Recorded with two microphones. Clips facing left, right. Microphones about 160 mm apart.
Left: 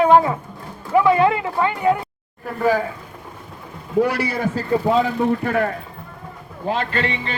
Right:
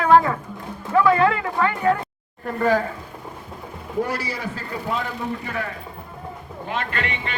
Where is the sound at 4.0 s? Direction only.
65° left (ahead or behind).